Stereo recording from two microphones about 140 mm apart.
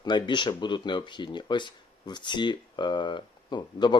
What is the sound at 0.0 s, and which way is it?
Speech, 30° left (ahead or behind).